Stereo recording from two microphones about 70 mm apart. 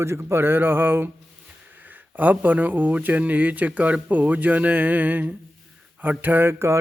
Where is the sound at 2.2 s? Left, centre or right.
Right.